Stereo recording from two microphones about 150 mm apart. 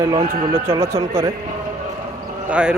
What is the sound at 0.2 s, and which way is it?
Speech, 35° right (ahead or behind).